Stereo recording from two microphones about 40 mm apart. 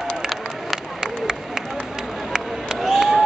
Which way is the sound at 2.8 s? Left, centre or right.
Centre.